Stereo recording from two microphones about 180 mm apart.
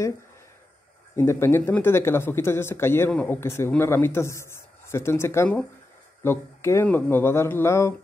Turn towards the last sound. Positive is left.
turn(degrees=15)  # may be behind; listen again after turning